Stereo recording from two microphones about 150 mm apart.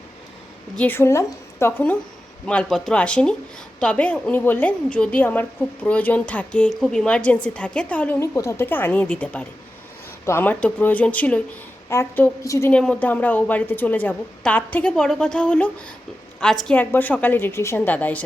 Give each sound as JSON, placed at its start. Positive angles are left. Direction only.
{"t": 0.8, "sound": "a woman's voice", "side_deg": 15}
{"t": 8.2, "sound": "a woman's voice", "side_deg": 20}